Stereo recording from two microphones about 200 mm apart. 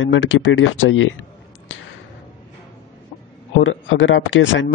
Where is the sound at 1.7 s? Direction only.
75° left (ahead or behind).